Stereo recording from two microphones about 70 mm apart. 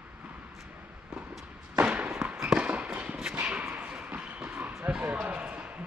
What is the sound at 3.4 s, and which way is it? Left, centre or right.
Whip, centre.